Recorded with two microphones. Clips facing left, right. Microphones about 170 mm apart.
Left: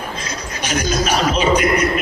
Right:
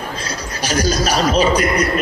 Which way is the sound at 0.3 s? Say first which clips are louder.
Right 2 dB; 35° right (ahead or behind).